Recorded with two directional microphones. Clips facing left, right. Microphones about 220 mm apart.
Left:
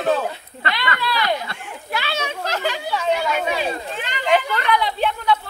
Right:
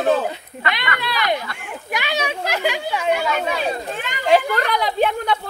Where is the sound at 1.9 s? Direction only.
15° right (ahead or behind).